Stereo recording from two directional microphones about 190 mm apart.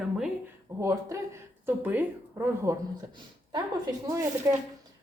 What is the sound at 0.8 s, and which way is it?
A woman's voice, 15° right (ahead or behind).